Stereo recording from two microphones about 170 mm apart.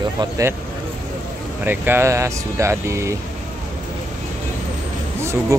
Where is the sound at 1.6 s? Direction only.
10° right (ahead or behind).